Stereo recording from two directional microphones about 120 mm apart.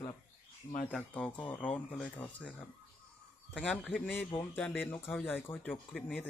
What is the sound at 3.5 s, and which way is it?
Speech, 10° left (ahead or behind).